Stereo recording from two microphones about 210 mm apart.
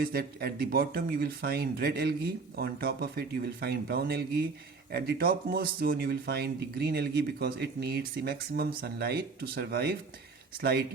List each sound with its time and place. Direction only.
0.0 s speech: 45° right (ahead or behind)